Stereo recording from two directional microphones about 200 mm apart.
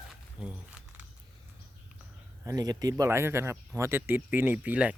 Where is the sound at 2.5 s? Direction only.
20° right (ahead or behind).